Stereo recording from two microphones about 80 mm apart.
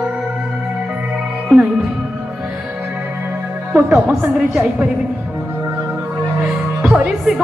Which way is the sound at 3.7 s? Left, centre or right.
Right.